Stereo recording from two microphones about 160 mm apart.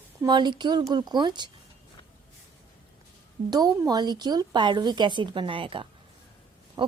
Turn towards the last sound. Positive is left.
turn(degrees=-35)  # may be behind; listen again after turning